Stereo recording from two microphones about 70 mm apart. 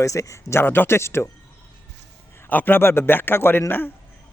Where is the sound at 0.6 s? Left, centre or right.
Left.